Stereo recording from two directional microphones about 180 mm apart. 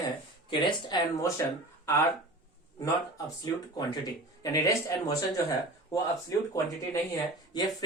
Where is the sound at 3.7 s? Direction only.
20° left (ahead or behind).